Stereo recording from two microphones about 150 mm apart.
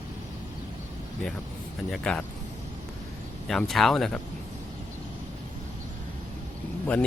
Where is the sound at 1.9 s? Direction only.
5° left (ahead or behind).